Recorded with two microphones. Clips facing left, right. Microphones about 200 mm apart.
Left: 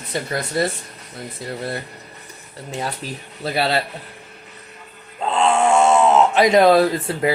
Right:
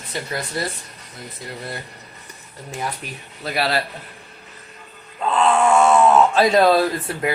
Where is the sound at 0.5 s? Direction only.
25° left (ahead or behind).